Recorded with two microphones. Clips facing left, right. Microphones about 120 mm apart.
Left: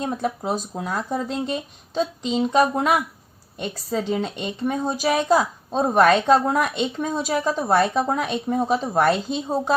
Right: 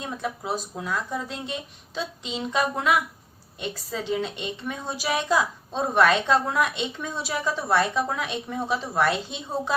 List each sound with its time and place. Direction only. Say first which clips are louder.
0.0 s a woman's voice: left 6 dB; 40° left (ahead or behind)